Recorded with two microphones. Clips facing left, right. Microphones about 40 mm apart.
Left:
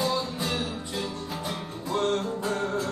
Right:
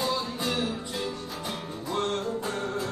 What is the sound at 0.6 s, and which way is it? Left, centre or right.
Music, centre.